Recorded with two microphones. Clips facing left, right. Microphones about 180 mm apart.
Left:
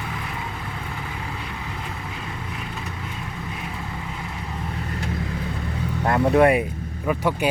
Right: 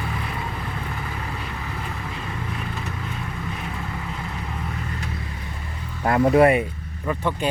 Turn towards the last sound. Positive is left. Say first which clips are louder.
# left 2 dB
turn(degrees=10)  # may be behind; listen again after turning